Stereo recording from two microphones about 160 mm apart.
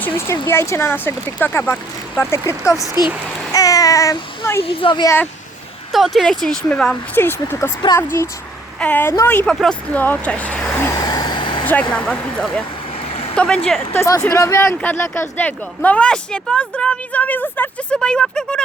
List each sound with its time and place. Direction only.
0.4 s a child's voice: 15° left (ahead or behind)
4.6 s speech: 35° left (ahead or behind)
5.0 s speech: 15° left (ahead or behind)
5.9 s speech: centre (ahead or behind)
7.9 s a child's voice: 25° left (ahead or behind)
8.8 s speech: 10° left (ahead or behind)
10.8 s vehicle: 20° left (ahead or behind)
11.6 s speech: 10° left (ahead or behind)
13.1 s vehicle: 40° left (ahead or behind)
13.3 s speech: 5° left (ahead or behind)